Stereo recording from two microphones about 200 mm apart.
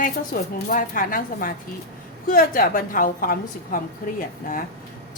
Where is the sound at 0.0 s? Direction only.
40° left (ahead or behind).